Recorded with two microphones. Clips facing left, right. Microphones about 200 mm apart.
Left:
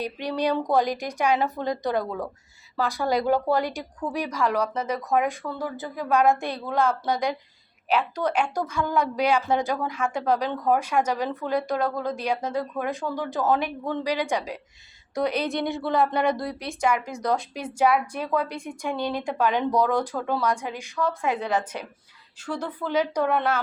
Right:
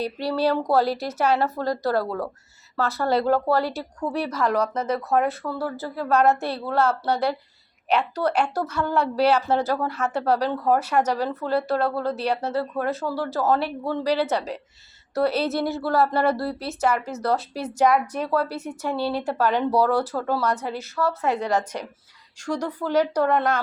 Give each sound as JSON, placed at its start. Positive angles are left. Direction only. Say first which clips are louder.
{"t": 0.0, "sound": "speech", "louder": "right 3 dB", "side_deg": 15}
{"t": 15.4, "sound": "a woman's voice", "louder": "right 2 dB", "side_deg": -5}
{"t": 16.1, "sound": "speech", "louder": "right 2 dB", "side_deg": 15}
{"t": 19.7, "sound": "a woman's voice", "louder": "right 2 dB", "side_deg": -10}
{"t": 20.4, "sound": "speech", "louder": "right 1 dB", "side_deg": 10}
{"t": 22.4, "sound": "a woman's voice", "louder": "right 3 dB", "side_deg": -10}
{"t": 23.2, "sound": "speech", "louder": "right 2 dB", "side_deg": 10}